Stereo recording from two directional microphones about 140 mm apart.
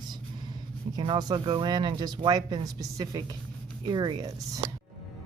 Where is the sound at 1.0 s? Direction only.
30° right (ahead or behind).